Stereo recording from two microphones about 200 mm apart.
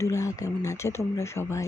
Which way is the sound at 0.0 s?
15° left (ahead or behind).